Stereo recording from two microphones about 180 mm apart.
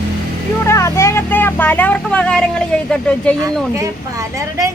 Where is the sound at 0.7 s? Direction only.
15° left (ahead or behind).